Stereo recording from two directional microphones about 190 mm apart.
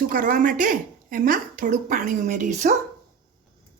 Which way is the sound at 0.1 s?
45° right (ahead or behind).